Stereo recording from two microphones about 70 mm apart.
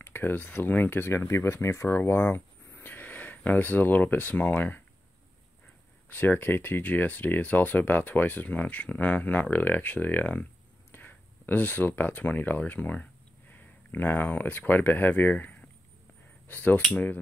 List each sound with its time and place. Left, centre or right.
0.0 s speech: left
6.0 s speech: left
16.4 s cutlery: left
16.9 s speech: left